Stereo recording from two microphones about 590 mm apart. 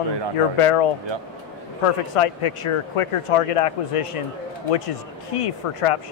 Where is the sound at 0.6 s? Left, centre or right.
Left.